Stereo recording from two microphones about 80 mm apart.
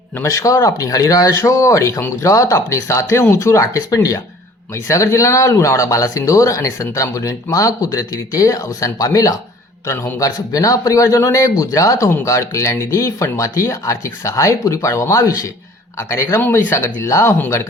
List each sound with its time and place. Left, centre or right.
0.2 s a man's voice: left